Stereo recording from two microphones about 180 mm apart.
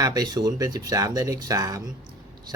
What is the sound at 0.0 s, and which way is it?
Speech, 20° right (ahead or behind).